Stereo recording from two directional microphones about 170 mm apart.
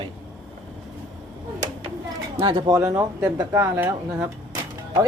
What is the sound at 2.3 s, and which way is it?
Speech, 30° right (ahead or behind).